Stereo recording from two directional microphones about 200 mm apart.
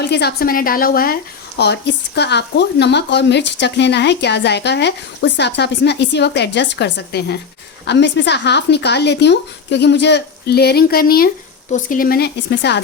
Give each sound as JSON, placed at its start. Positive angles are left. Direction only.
{"t": 0.0, "sound": "a woman's voice", "side_deg": 55}